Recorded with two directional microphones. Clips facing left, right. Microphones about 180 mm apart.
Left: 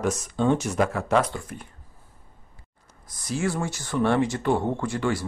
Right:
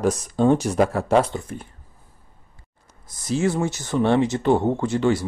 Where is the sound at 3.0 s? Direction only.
25° right (ahead or behind).